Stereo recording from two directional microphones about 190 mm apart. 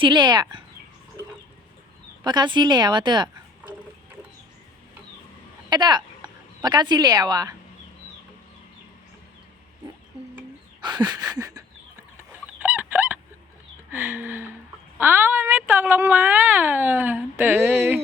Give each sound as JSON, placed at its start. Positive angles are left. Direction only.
{"t": 0.0, "sound": "a woman's voice", "side_deg": -25}
{"t": 2.2, "sound": "a woman's voice", "side_deg": -25}
{"t": 5.7, "sound": "speech", "side_deg": -20}
{"t": 10.8, "sound": "a woman's voice", "side_deg": -20}
{"t": 12.5, "sound": "chicken", "side_deg": -10}
{"t": 13.9, "sound": "speech", "side_deg": -10}